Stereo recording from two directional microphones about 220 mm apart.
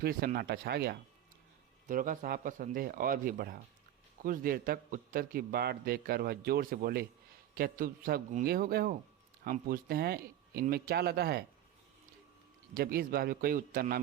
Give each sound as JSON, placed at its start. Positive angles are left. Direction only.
{"t": 0.0, "sound": "a man's voice", "side_deg": -40}
{"t": 12.7, "sound": "speech", "side_deg": -40}